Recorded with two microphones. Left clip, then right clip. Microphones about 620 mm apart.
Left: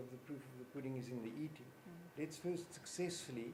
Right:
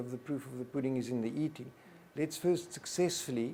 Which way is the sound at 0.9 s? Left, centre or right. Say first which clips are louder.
Right 11 dB; right.